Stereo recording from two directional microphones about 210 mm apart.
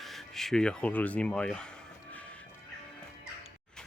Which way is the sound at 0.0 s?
Centre (ahead or behind).